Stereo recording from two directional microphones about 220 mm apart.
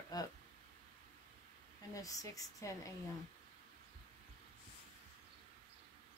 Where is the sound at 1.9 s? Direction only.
15° left (ahead or behind).